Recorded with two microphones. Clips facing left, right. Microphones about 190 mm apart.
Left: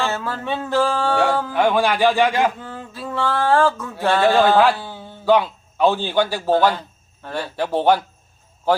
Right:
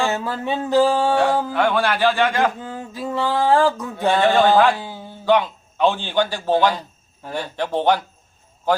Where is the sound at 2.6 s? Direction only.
15° right (ahead or behind).